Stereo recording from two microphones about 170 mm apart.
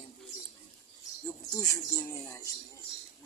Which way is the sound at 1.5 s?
20° left (ahead or behind).